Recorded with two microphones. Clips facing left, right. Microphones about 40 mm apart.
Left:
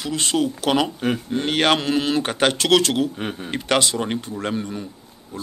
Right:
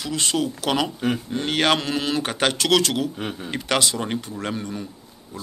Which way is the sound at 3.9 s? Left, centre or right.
Centre.